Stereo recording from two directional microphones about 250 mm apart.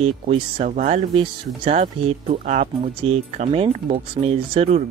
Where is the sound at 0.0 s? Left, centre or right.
Right.